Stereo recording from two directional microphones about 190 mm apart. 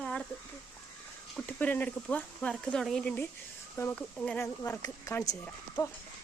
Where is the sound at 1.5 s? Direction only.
10° left (ahead or behind).